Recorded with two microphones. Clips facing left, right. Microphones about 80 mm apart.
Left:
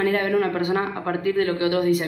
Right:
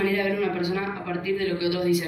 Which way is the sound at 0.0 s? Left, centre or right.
Left.